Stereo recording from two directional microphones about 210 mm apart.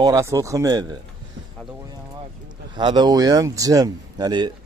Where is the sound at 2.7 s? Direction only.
20° right (ahead or behind).